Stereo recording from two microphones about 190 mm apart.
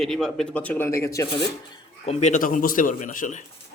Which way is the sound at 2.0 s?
35° left (ahead or behind).